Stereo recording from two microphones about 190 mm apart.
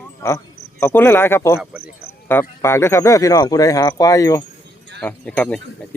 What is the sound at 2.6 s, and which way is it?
Speech, 15° left (ahead or behind).